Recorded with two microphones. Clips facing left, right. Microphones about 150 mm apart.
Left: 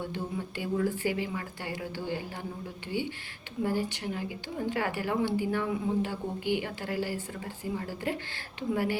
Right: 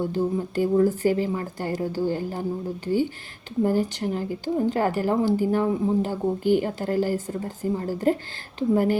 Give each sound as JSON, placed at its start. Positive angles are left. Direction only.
{"t": 0.0, "sound": "a woman's voice", "side_deg": -40}